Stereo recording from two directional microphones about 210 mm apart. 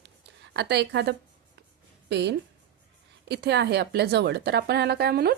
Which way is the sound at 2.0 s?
50° right (ahead or behind).